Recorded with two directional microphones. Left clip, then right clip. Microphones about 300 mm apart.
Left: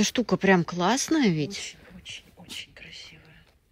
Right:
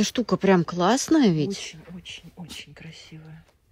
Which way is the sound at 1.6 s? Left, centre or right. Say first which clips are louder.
Right 2 dB; right.